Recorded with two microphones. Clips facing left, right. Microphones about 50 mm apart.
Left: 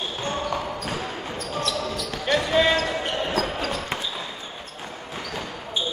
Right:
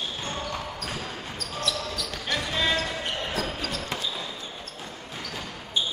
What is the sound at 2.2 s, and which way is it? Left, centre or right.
Basketball bounce, left.